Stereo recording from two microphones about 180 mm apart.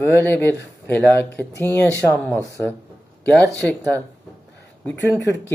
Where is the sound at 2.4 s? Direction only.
15° right (ahead or behind).